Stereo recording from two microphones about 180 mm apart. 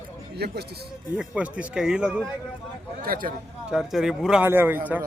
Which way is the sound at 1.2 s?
5° right (ahead or behind).